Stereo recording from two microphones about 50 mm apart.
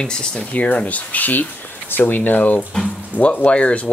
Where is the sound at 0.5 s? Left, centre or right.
Left.